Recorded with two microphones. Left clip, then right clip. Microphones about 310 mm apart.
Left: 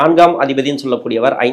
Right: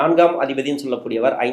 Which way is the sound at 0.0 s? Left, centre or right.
Left.